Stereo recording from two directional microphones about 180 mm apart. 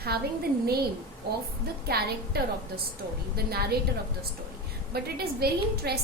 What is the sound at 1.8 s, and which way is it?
A woman's voice, 60° right (ahead or behind).